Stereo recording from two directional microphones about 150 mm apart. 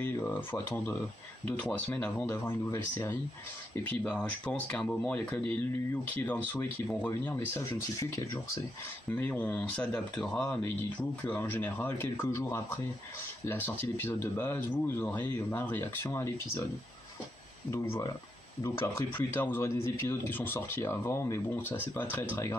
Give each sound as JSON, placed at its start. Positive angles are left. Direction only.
{"t": 0.0, "sound": "speech", "side_deg": 15}
{"t": 4.0, "sound": "speech", "side_deg": 5}
{"t": 17.6, "sound": "speech", "side_deg": 20}